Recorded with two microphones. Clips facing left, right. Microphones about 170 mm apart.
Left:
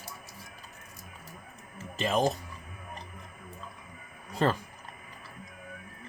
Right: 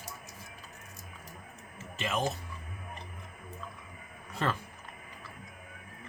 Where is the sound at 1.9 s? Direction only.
35° left (ahead or behind).